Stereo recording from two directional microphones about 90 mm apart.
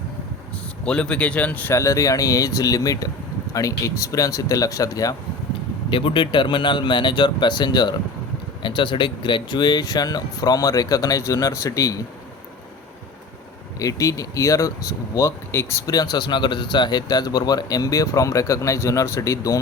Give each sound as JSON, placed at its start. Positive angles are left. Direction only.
{"t": 0.9, "sound": "speech", "side_deg": 10}
{"t": 1.7, "sound": "speech", "side_deg": 35}
{"t": 5.9, "sound": "speech", "side_deg": 70}
{"t": 13.7, "sound": "speech", "side_deg": 40}
{"t": 15.5, "sound": "speech", "side_deg": 25}
{"t": 15.9, "sound": "speech", "side_deg": 50}